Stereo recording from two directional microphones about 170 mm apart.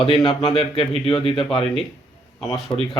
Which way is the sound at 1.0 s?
30° left (ahead or behind).